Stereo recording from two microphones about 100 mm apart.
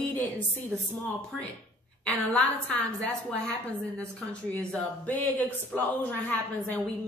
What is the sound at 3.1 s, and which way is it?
Speech, 10° left (ahead or behind).